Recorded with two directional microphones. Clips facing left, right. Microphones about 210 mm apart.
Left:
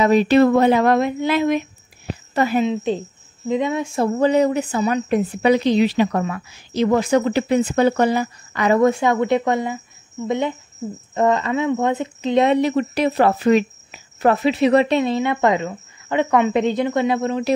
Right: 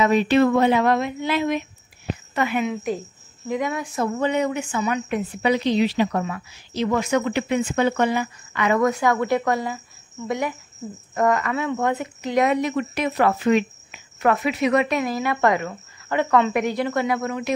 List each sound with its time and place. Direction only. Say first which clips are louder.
0.0 s a woman's voice: left 4 dB; 35° left (ahead or behind)
2.3 s a woman's voice: left 5 dB; 35° left (ahead or behind)
7.0 s a woman's voice: left 4 dB; 35° left (ahead or behind)